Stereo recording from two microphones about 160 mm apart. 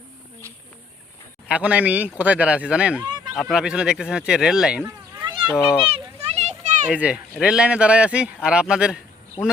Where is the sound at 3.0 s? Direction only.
25° right (ahead or behind).